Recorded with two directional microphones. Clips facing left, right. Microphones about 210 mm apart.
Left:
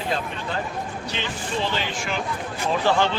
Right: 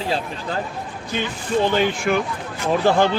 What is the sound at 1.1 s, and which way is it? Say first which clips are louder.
Speech: right 9 dB; 50° right (ahead or behind).